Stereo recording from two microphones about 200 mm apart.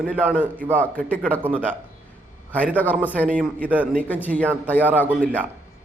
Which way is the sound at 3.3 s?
5° right (ahead or behind).